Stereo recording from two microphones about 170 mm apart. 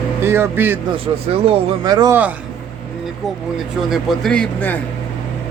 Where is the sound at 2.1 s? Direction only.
10° right (ahead or behind).